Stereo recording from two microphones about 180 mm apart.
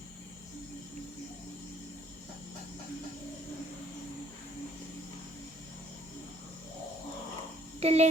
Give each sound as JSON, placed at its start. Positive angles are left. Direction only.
{"t": 7.8, "sound": "speech", "side_deg": -35}